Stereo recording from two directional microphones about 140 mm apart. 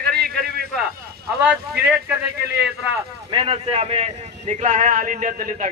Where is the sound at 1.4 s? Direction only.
10° right (ahead or behind).